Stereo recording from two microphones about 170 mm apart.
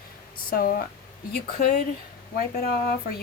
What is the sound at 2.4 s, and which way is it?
Speech, 60° left (ahead or behind).